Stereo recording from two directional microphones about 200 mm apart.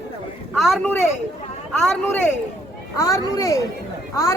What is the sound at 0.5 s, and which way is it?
A woman's voice, centre (ahead or behind).